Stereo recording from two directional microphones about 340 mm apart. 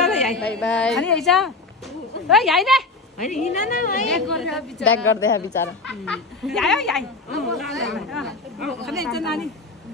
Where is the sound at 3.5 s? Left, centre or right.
Left.